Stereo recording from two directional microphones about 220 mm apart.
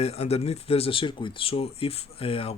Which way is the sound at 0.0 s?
30° left (ahead or behind).